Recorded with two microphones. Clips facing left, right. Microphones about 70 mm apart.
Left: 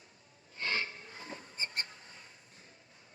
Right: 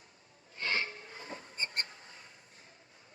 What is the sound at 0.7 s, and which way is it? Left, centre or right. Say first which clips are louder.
Train: right 2 dB; right.